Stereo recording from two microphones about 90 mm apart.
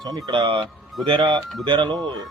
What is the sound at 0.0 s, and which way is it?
Speech, 55° right (ahead or behind).